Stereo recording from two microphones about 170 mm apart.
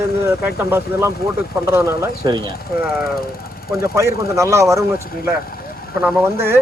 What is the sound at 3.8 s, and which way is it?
Speech, 15° right (ahead or behind).